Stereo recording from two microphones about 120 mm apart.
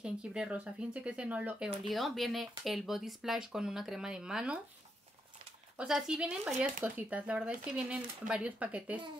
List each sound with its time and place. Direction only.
0.0 s speech: 5° right (ahead or behind)
1.9 s speech: centre (ahead or behind)
5.8 s speech: 5° right (ahead or behind)